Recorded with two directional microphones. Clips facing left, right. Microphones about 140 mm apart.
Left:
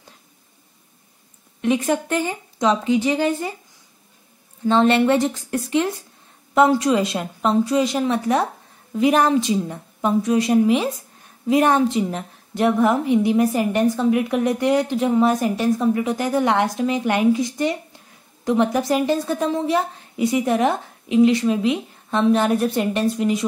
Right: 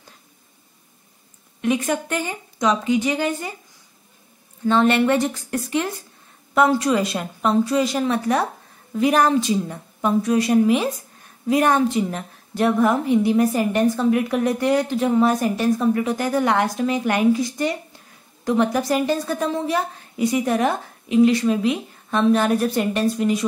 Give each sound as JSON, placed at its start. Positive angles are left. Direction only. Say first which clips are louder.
{"t": 1.6, "sound": "a woman's voice", "louder": "left 2 dB", "side_deg": 30}
{"t": 4.6, "sound": "a woman's voice", "louder": "left 1 dB", "side_deg": 30}